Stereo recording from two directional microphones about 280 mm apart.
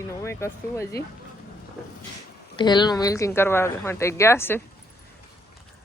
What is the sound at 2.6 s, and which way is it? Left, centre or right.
Speech, centre.